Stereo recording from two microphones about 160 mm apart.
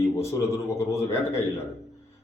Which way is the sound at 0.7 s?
15° left (ahead or behind).